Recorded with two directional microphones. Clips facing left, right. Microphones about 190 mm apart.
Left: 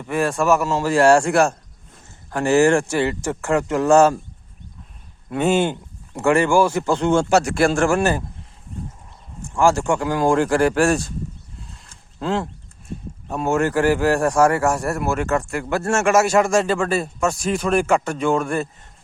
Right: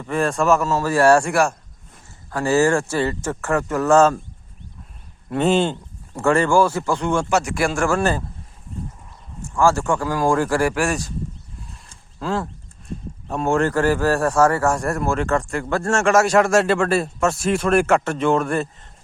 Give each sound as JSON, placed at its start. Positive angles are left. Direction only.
{"t": 0.0, "sound": "speech", "side_deg": 10}
{"t": 5.3, "sound": "a man's voice", "side_deg": 5}
{"t": 7.9, "sound": "speech", "side_deg": 15}
{"t": 9.6, "sound": "a man's voice", "side_deg": 15}
{"t": 12.2, "sound": "a man's voice", "side_deg": 20}
{"t": 13.2, "sound": "a man's voice", "side_deg": 5}